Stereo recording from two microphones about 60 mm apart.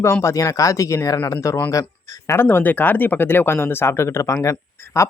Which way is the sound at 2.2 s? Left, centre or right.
Left.